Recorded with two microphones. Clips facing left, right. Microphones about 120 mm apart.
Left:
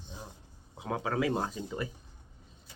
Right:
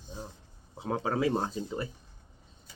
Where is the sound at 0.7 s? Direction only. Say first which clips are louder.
Right 2 dB; 30° right (ahead or behind).